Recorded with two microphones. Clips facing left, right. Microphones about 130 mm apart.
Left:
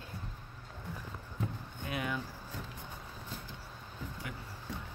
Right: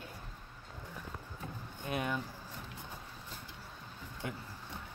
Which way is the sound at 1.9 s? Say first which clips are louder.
Right 1 dB; 25° right (ahead or behind).